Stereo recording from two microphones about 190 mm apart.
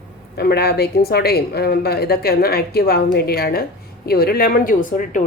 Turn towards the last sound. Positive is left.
turn(degrees=45)  # may be behind; listen again after turning